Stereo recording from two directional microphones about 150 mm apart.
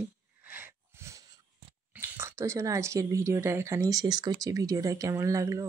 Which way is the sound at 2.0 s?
15° right (ahead or behind).